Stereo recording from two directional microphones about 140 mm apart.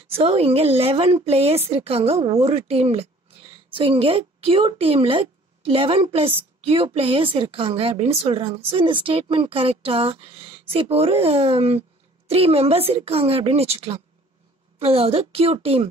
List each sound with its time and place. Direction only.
0.1 s a woman's voice: 45° right (ahead or behind)